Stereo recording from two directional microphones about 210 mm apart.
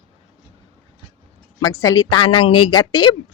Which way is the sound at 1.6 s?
15° left (ahead or behind).